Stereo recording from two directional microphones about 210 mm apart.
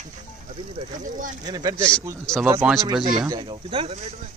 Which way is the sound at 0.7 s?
40° right (ahead or behind).